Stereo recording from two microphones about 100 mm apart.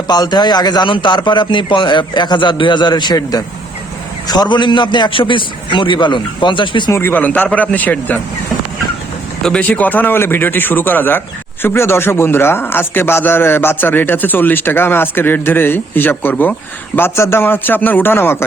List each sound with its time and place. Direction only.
0.1 s a man's voice: 45° left (ahead or behind)
6.9 s speech: 20° left (ahead or behind)
9.4 s a man's voice: 10° left (ahead or behind)